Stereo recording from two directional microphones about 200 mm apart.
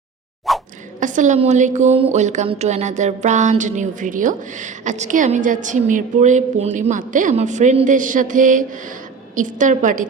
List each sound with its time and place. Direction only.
0.5 s plop: centre (ahead or behind)
0.9 s a woman's voice: 40° right (ahead or behind)